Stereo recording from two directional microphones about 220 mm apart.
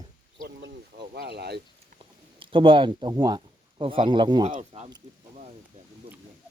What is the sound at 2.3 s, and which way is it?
Speech, 25° right (ahead or behind).